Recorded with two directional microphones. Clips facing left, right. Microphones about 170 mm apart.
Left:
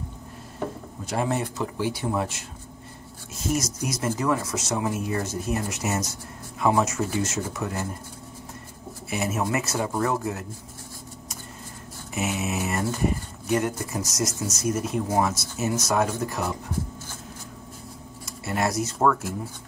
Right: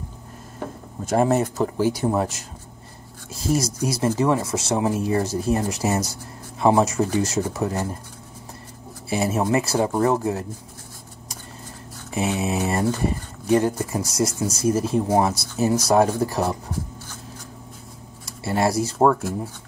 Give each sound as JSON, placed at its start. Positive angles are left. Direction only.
{"t": 1.0, "sound": "speech", "side_deg": -45}
{"t": 9.1, "sound": "speech", "side_deg": -30}
{"t": 12.1, "sound": "speech", "side_deg": -30}
{"t": 18.4, "sound": "speech", "side_deg": -30}